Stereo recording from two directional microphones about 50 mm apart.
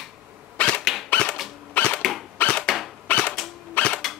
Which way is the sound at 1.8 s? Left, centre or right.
Left.